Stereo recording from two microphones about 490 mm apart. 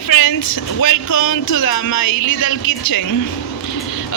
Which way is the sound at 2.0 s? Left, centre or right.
Left.